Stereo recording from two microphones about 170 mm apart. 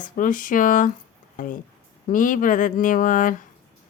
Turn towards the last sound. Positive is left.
turn(degrees=50)  # may be behind; listen again after turning